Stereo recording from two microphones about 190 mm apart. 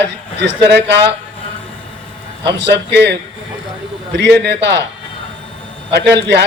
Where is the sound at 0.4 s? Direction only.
65° right (ahead or behind).